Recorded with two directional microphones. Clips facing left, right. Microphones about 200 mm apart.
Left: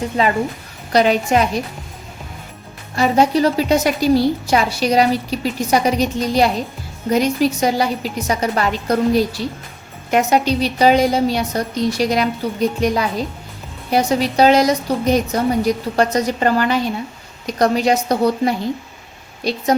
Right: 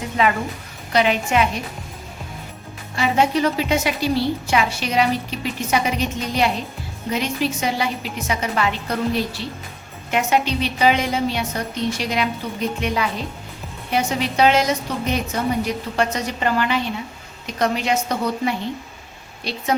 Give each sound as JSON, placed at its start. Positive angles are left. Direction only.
{"t": 0.2, "sound": "a woman's voice", "side_deg": 35}
{"t": 2.9, "sound": "a woman's voice", "side_deg": 40}